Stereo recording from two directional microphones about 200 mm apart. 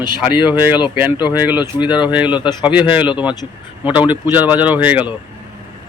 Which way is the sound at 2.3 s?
25° left (ahead or behind).